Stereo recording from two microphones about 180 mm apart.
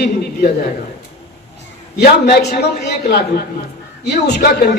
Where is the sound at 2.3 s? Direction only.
65° left (ahead or behind).